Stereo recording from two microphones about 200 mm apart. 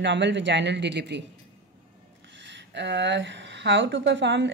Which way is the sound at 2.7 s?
60° right (ahead or behind).